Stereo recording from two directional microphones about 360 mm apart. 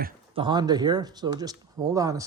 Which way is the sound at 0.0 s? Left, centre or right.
Centre.